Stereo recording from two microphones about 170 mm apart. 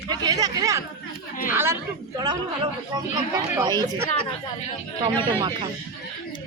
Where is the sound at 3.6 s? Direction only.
20° right (ahead or behind).